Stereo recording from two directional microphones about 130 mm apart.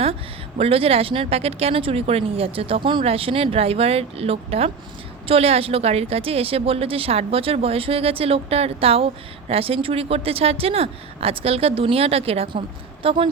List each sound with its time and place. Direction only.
0.6 s speech: 45° right (ahead or behind)